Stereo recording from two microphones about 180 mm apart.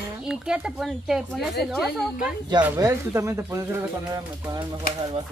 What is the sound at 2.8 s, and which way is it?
Speech, 15° right (ahead or behind).